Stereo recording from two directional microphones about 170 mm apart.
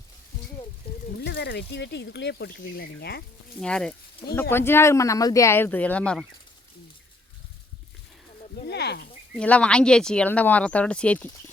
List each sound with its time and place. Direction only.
1.2 s speech: 90° left; by 3.2 s 70° left (ahead or behind)
3.6 s speech: 5° left (ahead or behind)
8.6 s speech: 80° left
9.3 s speech: 5° left (ahead or behind)